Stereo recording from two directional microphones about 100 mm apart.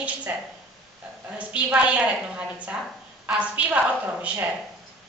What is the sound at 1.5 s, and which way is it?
A woman's voice, 10° right (ahead or behind).